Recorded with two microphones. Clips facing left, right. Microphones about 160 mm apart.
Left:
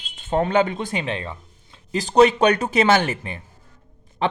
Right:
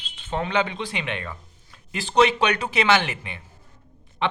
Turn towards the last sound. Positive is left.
turn(degrees=40)  # may be behind; listen again after turning